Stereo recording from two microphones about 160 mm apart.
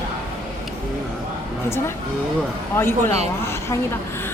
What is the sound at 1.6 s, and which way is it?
A woman's voice, 15° left (ahead or behind).